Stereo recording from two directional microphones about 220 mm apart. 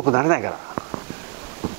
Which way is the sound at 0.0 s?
20° right (ahead or behind).